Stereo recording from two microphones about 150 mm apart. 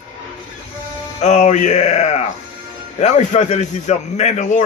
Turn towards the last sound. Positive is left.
turn(degrees=50)  # may be behind; listen again after turning